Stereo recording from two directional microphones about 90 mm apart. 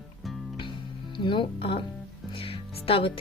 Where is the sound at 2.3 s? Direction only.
90° left.